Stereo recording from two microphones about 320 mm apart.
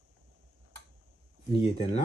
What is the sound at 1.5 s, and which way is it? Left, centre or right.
Speech, centre.